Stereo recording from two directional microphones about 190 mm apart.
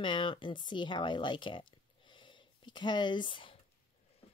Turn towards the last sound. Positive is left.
turn(degrees=25)  # may be behind; listen again after turning